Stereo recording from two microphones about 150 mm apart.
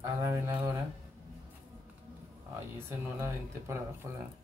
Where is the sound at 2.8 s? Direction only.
15° right (ahead or behind).